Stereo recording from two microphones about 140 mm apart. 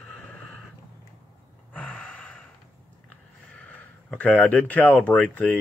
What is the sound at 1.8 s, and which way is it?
Gasp, 10° left (ahead or behind).